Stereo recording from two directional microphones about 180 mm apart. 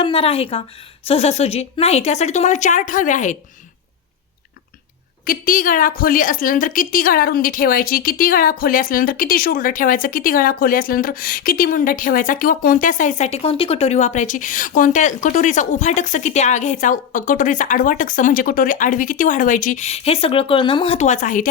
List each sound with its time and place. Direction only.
0.0 s speech: 30° left (ahead or behind)
5.2 s a woman's voice: 50° left (ahead or behind)